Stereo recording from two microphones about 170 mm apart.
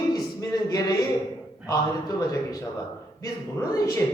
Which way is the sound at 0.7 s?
20° left (ahead or behind).